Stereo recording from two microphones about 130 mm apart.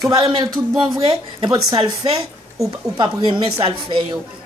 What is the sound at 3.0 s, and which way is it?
Speech, 35° right (ahead or behind).